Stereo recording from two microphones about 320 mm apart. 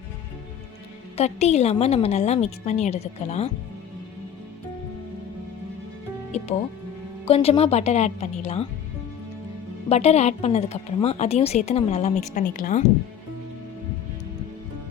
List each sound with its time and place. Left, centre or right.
1.1 s a woman's voice: centre
7.3 s a woman's voice: centre
9.9 s a woman's voice: centre